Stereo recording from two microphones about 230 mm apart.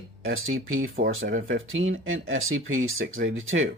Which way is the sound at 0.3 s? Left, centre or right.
Right.